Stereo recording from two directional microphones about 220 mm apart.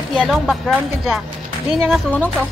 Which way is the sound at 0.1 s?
Centre (ahead or behind).